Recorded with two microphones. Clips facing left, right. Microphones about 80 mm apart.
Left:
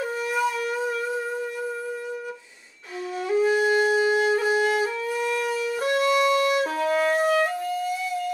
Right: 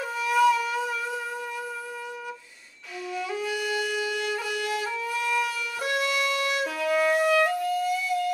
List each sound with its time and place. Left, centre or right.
0.0 s wind instrument: left
3.3 s wind instrument: left